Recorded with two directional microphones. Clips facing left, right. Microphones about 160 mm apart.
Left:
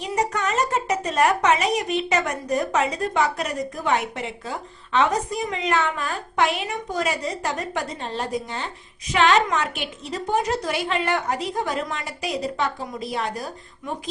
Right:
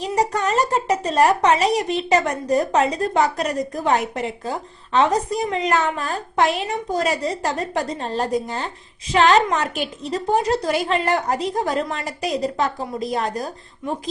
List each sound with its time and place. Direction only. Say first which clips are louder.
0.0 s a woman's voice: right 3 dB; 35° right (ahead or behind)